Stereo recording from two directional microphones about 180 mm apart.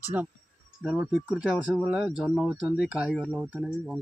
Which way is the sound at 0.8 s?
5° right (ahead or behind).